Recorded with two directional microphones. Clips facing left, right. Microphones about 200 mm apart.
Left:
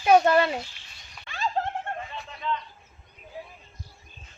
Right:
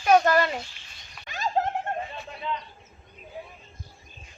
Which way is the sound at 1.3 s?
40° right (ahead or behind).